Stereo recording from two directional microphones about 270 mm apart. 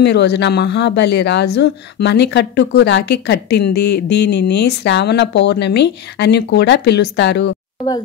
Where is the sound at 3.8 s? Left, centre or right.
Left.